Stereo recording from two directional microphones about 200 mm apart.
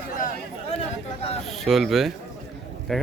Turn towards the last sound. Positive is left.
turn(degrees=0)  # may be behind; listen again after turning